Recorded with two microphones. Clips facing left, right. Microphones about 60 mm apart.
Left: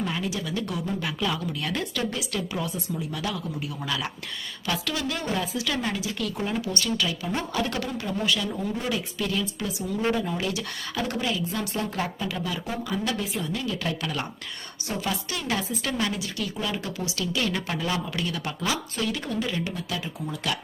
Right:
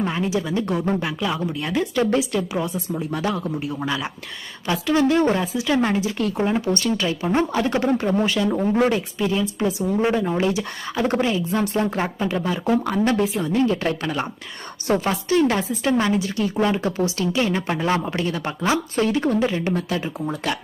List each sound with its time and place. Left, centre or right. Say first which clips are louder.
0.0 s speech: right 6 dB; right
2.0 s speech: right 9 dB; right
2.9 s speech: right 9 dB; right
5.5 s speech: right 8 dB; right
9.1 s speech: right 6 dB; right
12.6 s speech: right 10 dB; right
13.3 s speech: right 9 dB; right
14.8 s a woman's voice: right 9 dB; right
15.1 s speech: right 10 dB; right